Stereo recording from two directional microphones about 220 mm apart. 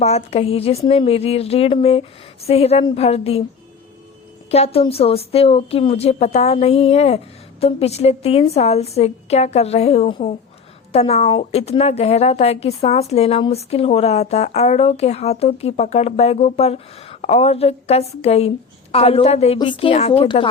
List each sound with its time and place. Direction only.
0.0 s a woman's voice: 30° left (ahead or behind)
4.5 s a woman's voice: 25° left (ahead or behind)